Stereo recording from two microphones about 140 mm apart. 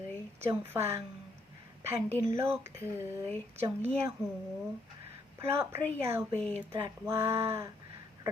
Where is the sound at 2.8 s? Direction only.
20° right (ahead or behind).